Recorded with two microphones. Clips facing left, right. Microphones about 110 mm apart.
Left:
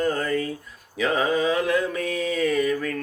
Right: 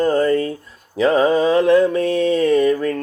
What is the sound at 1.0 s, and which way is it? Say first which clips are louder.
Mantra: right 8 dB; 30° right (ahead or behind).